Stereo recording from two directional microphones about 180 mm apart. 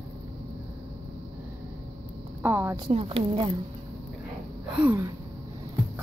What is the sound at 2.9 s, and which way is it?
Speech, 35° right (ahead or behind).